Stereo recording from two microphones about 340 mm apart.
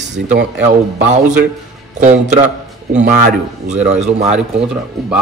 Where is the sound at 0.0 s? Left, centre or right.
Right.